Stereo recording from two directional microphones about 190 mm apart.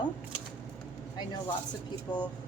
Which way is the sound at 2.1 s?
20° left (ahead or behind).